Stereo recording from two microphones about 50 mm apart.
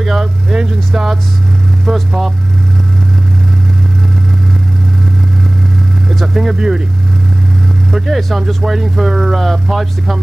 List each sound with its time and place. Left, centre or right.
0.0 s speech: centre
6.0 s speech: centre
7.9 s speech: centre